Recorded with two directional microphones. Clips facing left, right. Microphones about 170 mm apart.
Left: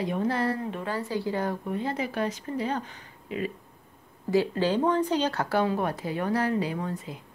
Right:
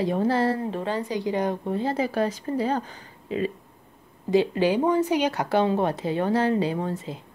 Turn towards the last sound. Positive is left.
turn(degrees=-25)  # may be behind; listen again after turning